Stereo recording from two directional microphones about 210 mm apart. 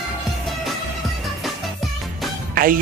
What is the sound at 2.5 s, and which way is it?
Music, 45° right (ahead or behind).